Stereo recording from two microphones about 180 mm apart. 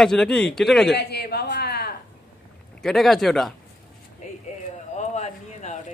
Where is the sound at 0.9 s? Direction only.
65° left (ahead or behind).